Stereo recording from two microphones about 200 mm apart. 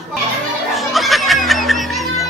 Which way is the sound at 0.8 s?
Centre (ahead or behind).